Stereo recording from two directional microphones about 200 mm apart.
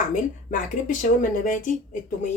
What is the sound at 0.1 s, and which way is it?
Speech, 40° left (ahead or behind).